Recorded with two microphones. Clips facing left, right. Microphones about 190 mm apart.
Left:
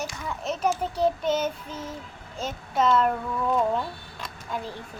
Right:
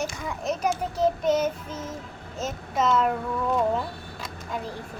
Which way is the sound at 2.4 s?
5° right (ahead or behind).